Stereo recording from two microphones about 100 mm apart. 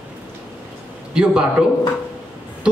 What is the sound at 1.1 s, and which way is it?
Speech, 10° right (ahead or behind).